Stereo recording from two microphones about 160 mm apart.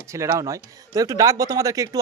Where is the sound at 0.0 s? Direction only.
20° right (ahead or behind).